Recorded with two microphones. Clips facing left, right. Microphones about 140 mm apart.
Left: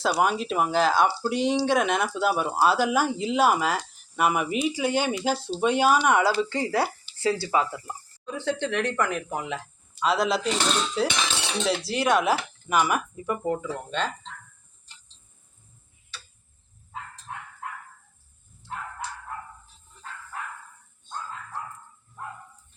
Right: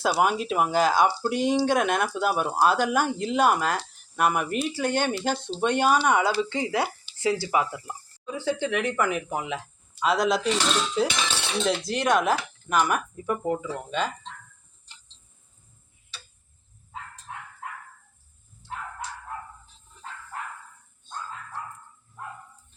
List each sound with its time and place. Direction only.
0.0 s speech: 5° right (ahead or behind)
7.4 s speech: 15° right (ahead or behind)
8.2 s speech: 5° right (ahead or behind)